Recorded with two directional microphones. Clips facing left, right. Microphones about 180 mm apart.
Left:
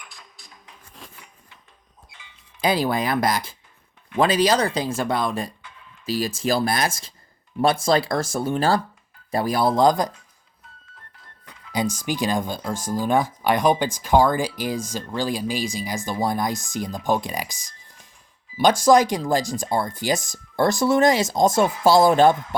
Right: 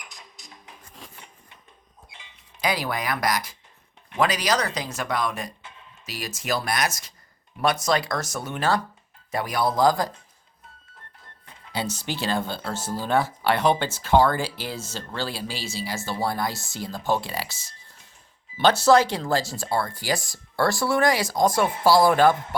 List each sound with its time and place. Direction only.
0.1 s music: 20° right (ahead or behind)
2.6 s speech: 25° left (ahead or behind)
11.7 s speech: 10° left (ahead or behind)